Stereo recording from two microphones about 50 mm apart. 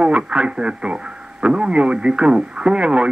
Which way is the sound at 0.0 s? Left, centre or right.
Right.